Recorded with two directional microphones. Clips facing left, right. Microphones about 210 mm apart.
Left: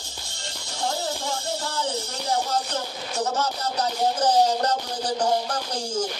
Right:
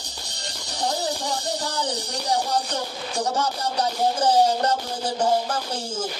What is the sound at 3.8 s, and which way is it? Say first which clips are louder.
Music: right 1 dB; 10° right (ahead or behind).